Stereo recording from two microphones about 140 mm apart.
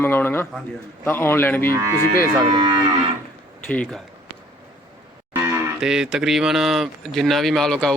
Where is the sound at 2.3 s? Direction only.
30° right (ahead or behind).